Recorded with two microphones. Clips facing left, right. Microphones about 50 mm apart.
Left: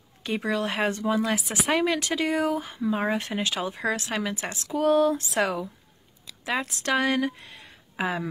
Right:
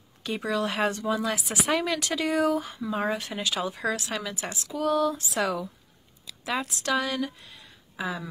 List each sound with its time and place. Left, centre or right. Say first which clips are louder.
0.2 s speech: left 1 dB; left